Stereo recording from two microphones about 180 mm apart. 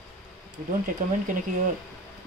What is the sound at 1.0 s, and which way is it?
Speech, 50° right (ahead or behind).